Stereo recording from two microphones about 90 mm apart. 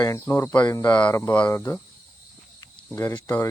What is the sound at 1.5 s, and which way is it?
Speech, 30° left (ahead or behind).